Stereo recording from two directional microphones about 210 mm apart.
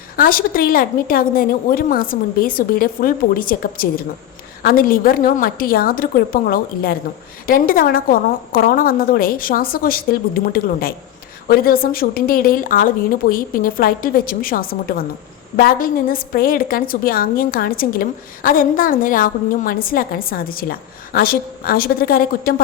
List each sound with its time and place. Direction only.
0.2 s a woman's voice: 45° left (ahead or behind)